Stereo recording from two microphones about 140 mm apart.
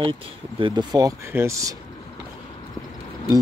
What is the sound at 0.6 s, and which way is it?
Speech, 35° right (ahead or behind).